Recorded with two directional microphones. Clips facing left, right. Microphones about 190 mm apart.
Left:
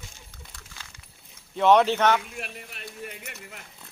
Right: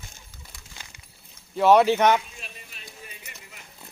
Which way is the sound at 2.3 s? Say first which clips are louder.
Left 7 dB; 65° left (ahead or behind).